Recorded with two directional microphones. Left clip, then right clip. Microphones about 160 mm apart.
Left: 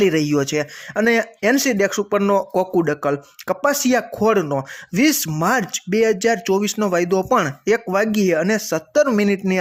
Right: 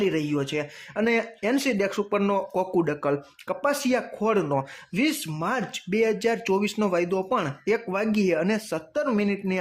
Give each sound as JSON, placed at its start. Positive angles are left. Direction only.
{"t": 0.0, "sound": "speech", "side_deg": 30}
{"t": 4.9, "sound": "speech", "side_deg": 35}